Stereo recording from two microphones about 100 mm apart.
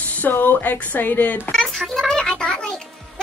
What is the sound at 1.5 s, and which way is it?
Music, 5° left (ahead or behind).